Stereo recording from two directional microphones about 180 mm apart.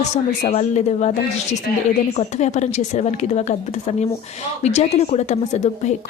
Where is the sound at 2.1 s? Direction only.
40° left (ahead or behind).